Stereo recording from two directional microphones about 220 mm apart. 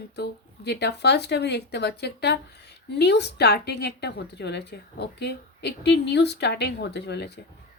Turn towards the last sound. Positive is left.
turn(degrees=50)  # may be behind; listen again after turning